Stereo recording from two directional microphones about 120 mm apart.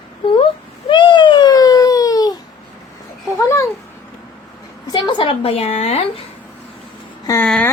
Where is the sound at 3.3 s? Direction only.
25° left (ahead or behind).